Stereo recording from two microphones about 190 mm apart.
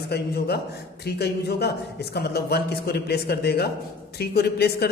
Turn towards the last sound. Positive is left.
turn(degrees=60)  # may be behind; listen again after turning